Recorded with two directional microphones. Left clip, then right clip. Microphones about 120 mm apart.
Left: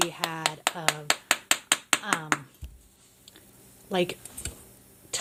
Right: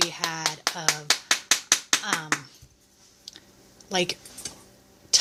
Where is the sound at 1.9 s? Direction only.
30° left (ahead or behind).